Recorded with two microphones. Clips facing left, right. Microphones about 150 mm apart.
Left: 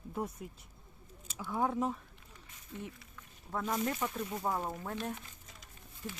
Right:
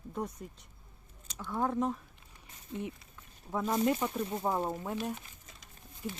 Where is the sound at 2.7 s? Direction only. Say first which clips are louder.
Right 6 dB; 25° right (ahead or behind).